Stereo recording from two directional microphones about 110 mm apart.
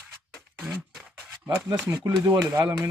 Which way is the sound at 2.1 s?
35° right (ahead or behind).